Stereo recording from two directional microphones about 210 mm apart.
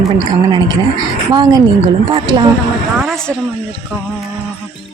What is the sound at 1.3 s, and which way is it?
A woman's voice, 20° right (ahead or behind).